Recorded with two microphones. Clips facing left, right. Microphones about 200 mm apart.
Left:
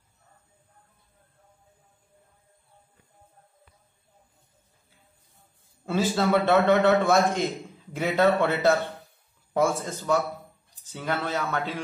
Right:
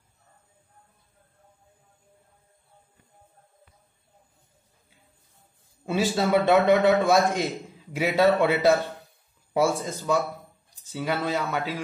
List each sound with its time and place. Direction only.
5.9 s a man's voice: 15° right (ahead or behind)